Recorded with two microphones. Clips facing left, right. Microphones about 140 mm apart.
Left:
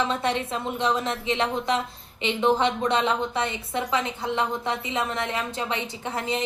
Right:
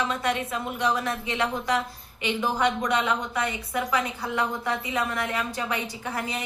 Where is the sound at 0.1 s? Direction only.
25° left (ahead or behind).